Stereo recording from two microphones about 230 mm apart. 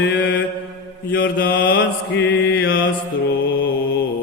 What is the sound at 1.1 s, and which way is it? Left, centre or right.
Mantra, left.